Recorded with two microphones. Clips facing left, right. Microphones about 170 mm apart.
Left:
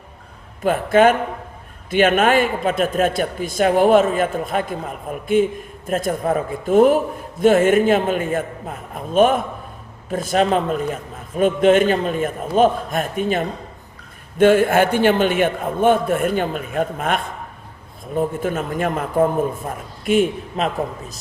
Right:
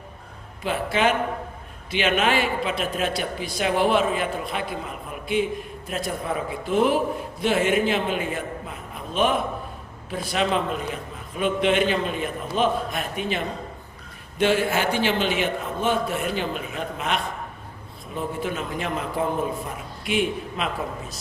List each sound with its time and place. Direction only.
0.6 s a man's voice: 50° left (ahead or behind)